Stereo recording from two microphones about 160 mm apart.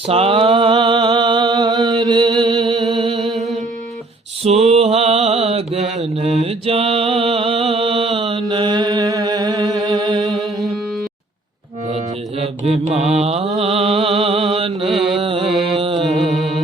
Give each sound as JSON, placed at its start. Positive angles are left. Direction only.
{"t": 0.1, "sound": "a sound", "side_deg": -35}
{"t": 2.9, "sound": "music", "side_deg": -30}
{"t": 3.2, "sound": "music", "side_deg": 0}
{"t": 4.7, "sound": "mantra", "side_deg": -40}
{"t": 8.4, "sound": "a sound", "side_deg": -30}
{"t": 10.2, "sound": "music", "side_deg": 0}
{"t": 11.9, "sound": "mantra", "side_deg": -40}
{"t": 14.8, "sound": "mantra", "side_deg": 0}
{"t": 15.2, "sound": "mantra", "side_deg": -35}
{"t": 15.4, "sound": "mantra", "side_deg": 0}
{"t": 15.8, "sound": "music", "side_deg": -30}
{"t": 16.0, "sound": "music", "side_deg": 0}